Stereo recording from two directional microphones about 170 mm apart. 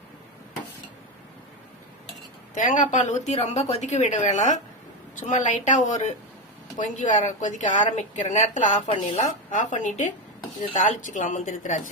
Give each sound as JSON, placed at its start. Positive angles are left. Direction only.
{"t": 2.6, "sound": "a woman's voice", "side_deg": 50}